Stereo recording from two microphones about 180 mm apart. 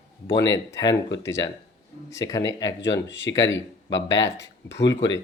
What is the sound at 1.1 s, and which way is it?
Speech, 80° left.